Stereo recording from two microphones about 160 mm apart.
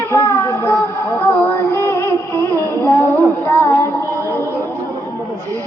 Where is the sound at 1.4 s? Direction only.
10° left (ahead or behind).